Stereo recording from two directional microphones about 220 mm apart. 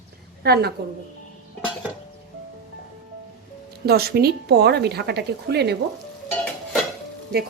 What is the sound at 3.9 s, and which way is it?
A woman's voice, 45° right (ahead or behind).